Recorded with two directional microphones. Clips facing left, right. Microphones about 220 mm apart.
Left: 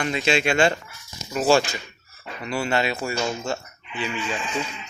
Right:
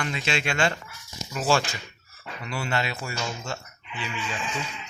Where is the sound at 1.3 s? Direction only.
25° left (ahead or behind).